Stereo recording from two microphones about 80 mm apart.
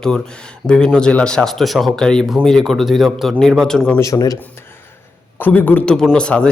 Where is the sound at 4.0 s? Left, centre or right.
Left.